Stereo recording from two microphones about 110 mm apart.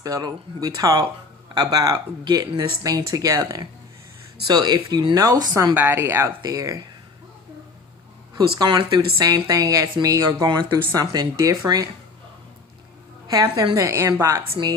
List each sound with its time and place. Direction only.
0.0 s speech: 35° right (ahead or behind)
5.7 s a woman's voice: 20° right (ahead or behind)
6.4 s speech: 35° right (ahead or behind)
8.4 s speech: 40° right (ahead or behind)
8.8 s speech: 55° right (ahead or behind)
9.1 s speech: 35° right (ahead or behind)
13.2 s a woman's voice: 35° right (ahead or behind)